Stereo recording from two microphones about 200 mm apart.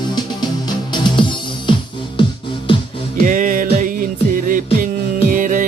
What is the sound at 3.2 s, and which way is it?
Music, 45° right (ahead or behind).